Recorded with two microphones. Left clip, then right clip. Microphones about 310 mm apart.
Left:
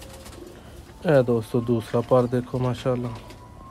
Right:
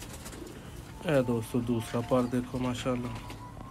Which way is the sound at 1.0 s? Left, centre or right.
Left.